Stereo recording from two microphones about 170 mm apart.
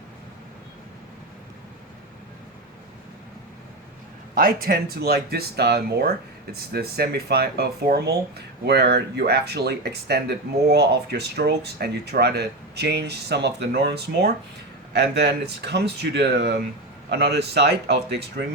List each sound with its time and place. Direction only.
4.4 s speech: 60° right (ahead or behind); by 18.2 s 75° right (ahead or behind)